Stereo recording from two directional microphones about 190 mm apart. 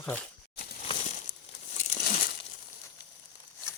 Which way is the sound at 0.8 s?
30° left (ahead or behind).